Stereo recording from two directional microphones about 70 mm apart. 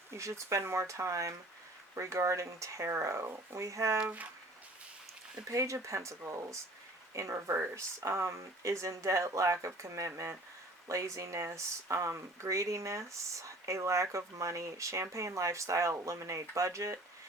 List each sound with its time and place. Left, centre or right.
0.2 s speech: right
4.0 s speech: right
5.5 s speech: right